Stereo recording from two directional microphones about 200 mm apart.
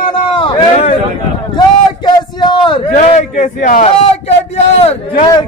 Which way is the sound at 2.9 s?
40° left (ahead or behind).